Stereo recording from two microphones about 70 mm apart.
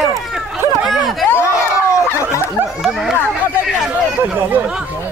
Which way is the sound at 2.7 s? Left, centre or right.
Centre.